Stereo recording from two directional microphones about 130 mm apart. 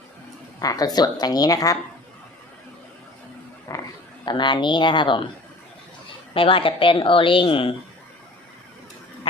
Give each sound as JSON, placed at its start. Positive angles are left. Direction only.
{"t": 0.6, "sound": "a woman's voice", "side_deg": 30}
{"t": 3.7, "sound": "a sound", "side_deg": 25}
{"t": 4.3, "sound": "a woman's voice", "side_deg": 35}
{"t": 6.3, "sound": "speech", "side_deg": 45}